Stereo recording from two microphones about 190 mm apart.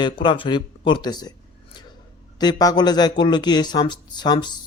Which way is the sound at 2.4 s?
20° left (ahead or behind).